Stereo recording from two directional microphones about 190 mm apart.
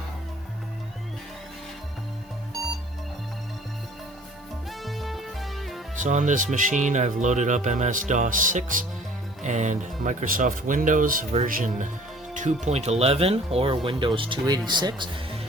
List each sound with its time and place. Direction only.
4.8 s music: centre (ahead or behind)
6.0 s speech: 40° right (ahead or behind); by 15.4 s 25° right (ahead or behind)